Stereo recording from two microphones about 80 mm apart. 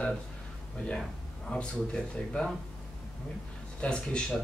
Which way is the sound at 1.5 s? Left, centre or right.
Centre.